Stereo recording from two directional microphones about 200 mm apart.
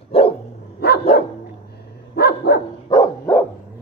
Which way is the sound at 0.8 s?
55° left (ahead or behind).